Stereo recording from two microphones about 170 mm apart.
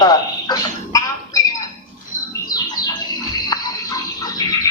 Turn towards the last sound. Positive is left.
turn(degrees=20)  # may be behind; listen again after turning